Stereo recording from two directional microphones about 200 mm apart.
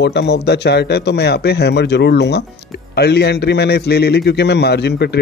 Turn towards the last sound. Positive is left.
turn(degrees=55)  # may be behind; listen again after turning